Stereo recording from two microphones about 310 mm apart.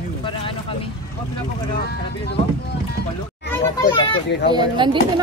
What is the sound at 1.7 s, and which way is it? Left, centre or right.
Speech, left.